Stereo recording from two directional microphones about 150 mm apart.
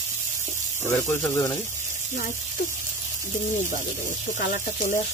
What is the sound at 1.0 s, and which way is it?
Speech, 15° left (ahead or behind).